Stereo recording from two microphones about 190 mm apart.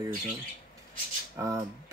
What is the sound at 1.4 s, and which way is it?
Speech, 15° right (ahead or behind).